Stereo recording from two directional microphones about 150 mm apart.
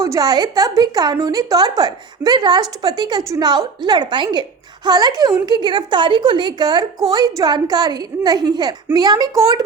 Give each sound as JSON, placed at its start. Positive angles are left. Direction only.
{"t": 0.0, "sound": "a woman's voice", "side_deg": -25}